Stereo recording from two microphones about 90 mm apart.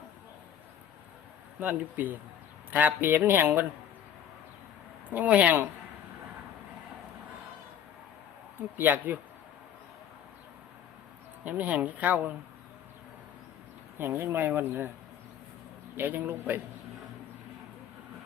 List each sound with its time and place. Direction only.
1.5 s a man's voice: 20° right (ahead or behind)
5.1 s speech: 15° right (ahead or behind)
8.8 s a man's voice: 20° right (ahead or behind)
11.4 s speech: 15° right (ahead or behind)
14.0 s a man's voice: 25° right (ahead or behind)
16.0 s a man's voice: 25° right (ahead or behind)